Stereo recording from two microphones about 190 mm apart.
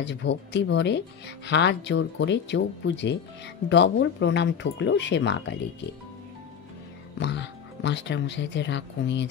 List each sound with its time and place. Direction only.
0.0 s speech: 70° left (ahead or behind)
7.2 s speech: 65° left (ahead or behind)